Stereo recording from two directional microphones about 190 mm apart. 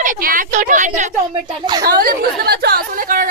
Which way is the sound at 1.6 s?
20° right (ahead or behind).